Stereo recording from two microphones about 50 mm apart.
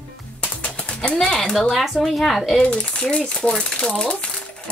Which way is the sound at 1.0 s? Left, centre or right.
Centre.